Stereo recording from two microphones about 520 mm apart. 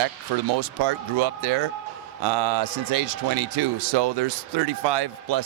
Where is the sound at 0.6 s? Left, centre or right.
Right.